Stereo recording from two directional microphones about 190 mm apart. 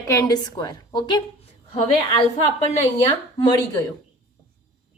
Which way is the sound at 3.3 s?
20° left (ahead or behind).